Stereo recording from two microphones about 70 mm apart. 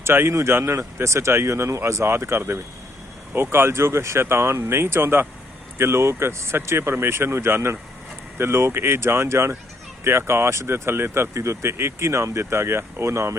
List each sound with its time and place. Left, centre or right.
0.0 s speech: right